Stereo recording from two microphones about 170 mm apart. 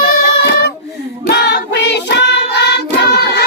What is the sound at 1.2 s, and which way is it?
Child singing, 80° left.